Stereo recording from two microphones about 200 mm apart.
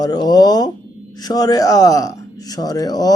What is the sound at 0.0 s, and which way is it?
Speech, 20° left (ahead or behind).